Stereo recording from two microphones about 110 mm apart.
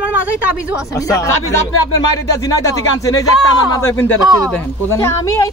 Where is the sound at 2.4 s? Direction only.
35° left (ahead or behind).